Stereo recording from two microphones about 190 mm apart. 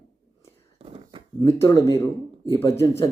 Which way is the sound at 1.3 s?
15° left (ahead or behind).